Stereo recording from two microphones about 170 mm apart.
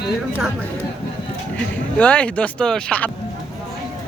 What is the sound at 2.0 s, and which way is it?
Speech, 5° left (ahead or behind).